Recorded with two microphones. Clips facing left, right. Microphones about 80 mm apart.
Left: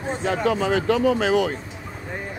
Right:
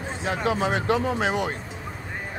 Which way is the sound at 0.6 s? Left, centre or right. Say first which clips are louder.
Left 3 dB; right.